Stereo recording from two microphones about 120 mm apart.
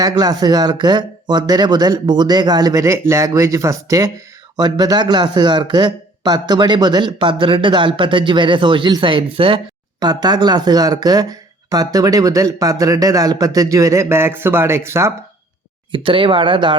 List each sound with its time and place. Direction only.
0.0 s speech: 30° right (ahead or behind)
10.0 s speech: 35° right (ahead or behind)
15.9 s speech: 45° right (ahead or behind)